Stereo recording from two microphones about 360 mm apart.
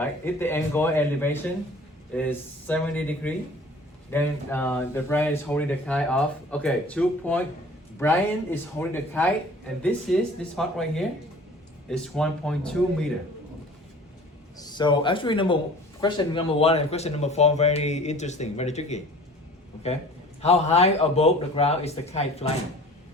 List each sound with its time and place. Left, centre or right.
0.0 s speech: centre
14.6 s speech: centre
20.4 s speech: centre